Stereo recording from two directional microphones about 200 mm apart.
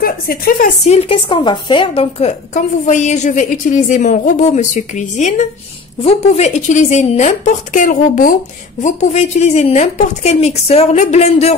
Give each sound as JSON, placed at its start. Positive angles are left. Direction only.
{"t": 0.0, "sound": "a woman's voice", "side_deg": 45}
{"t": 0.8, "sound": "a woman's voice", "side_deg": 30}